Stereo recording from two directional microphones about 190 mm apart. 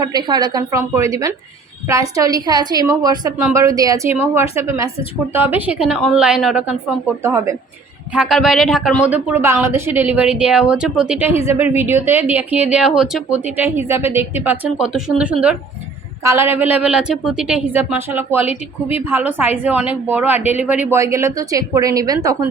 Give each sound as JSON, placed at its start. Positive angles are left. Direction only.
{"t": 0.0, "sound": "a woman's voice", "side_deg": -20}
{"t": 7.2, "sound": "speech", "side_deg": -15}
{"t": 8.1, "sound": "speech", "side_deg": 0}